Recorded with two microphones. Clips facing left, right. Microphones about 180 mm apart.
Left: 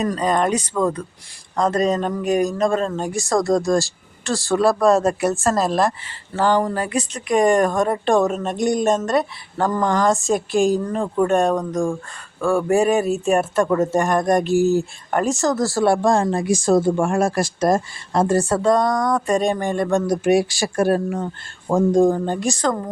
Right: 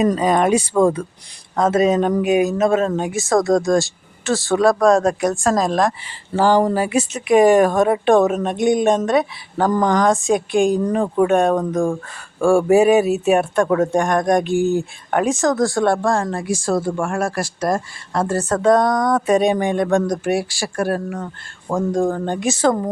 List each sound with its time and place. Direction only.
0.2 s speech: 5° right (ahead or behind)
6.3 s speech: 10° right (ahead or behind); by 18.6 s 10° left (ahead or behind)
18.6 s speech: centre (ahead or behind)
20.2 s speech: 15° left (ahead or behind)
22.2 s speech: centre (ahead or behind)